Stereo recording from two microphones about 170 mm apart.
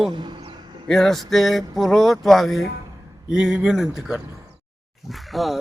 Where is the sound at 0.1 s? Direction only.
30° right (ahead or behind).